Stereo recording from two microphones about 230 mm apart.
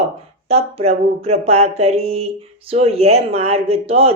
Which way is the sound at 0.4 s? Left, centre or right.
Right.